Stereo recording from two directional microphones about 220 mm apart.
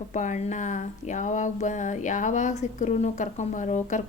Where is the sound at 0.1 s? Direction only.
35° left (ahead or behind).